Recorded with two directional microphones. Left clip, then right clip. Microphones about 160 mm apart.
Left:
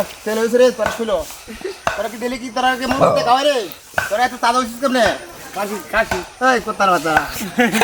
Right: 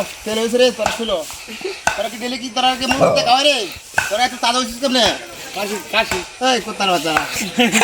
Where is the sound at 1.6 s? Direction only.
10° right (ahead or behind).